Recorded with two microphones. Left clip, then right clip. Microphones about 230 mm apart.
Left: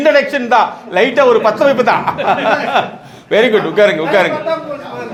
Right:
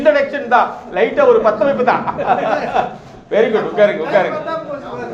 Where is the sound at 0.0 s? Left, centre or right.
Left.